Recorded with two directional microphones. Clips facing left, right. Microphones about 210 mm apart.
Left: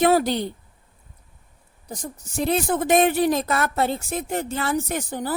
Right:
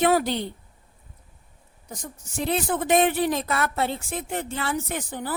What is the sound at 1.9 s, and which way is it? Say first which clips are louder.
A woman's voice: left 4 dB; 35° left (ahead or behind).